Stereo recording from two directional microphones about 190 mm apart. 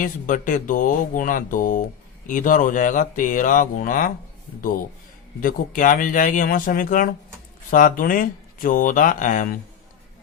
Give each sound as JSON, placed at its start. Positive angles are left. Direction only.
{"t": 0.0, "sound": "speech", "side_deg": 45}
{"t": 5.4, "sound": "speech", "side_deg": 45}